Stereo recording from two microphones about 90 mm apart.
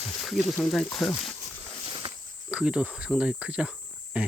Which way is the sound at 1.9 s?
60° right (ahead or behind).